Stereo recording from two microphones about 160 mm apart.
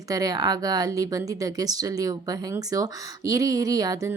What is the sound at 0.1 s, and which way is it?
Speech, 25° right (ahead or behind).